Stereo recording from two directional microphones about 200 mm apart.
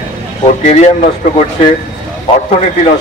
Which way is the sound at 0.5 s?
35° left (ahead or behind).